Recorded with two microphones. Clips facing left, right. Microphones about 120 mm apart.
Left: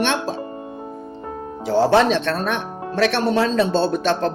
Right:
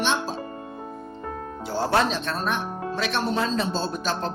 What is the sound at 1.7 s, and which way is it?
Speech, 90° left.